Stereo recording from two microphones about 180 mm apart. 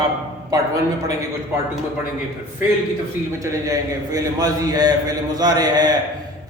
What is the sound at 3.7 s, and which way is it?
A man's voice, 20° right (ahead or behind).